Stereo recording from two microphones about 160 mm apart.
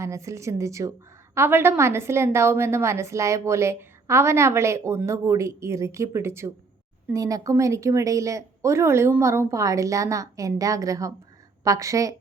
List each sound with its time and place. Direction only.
0.0 s a woman's voice: 20° right (ahead or behind)